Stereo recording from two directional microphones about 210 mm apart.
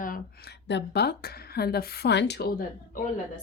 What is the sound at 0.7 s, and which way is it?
A woman's voice, 55° left (ahead or behind).